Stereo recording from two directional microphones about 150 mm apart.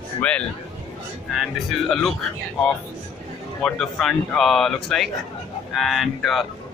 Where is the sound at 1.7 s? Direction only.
Centre (ahead or behind).